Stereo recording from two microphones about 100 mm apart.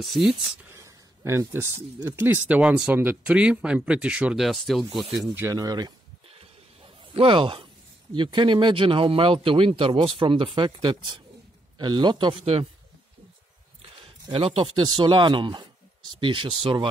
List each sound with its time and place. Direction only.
0.0 s speech: centre (ahead or behind)
0.7 s a sound: 30° right (ahead or behind)
2.1 s speech: 20° right (ahead or behind)
4.5 s speech: centre (ahead or behind)
5.5 s speech: 40° right (ahead or behind)
6.3 s a sound: 70° right (ahead or behind)
8.1 s speech: 50° right (ahead or behind)
14.0 s speech: 60° right (ahead or behind)
14.8 s speech: 50° right (ahead or behind)